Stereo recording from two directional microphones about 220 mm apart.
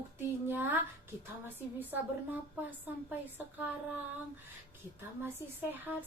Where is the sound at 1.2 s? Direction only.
10° right (ahead or behind).